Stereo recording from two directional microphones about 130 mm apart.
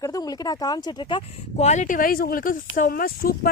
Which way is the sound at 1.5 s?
65° left (ahead or behind).